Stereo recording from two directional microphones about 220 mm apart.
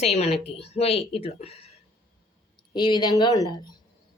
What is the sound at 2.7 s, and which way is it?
A woman's voice, 20° left (ahead or behind).